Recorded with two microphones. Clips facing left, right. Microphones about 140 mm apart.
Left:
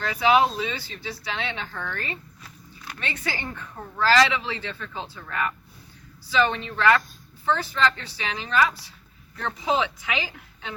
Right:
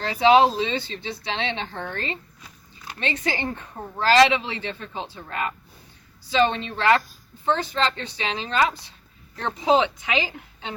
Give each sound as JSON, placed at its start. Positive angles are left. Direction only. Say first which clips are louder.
{"t": 0.0, "sound": "a woman's voice", "louder": "right 4 dB", "side_deg": -30}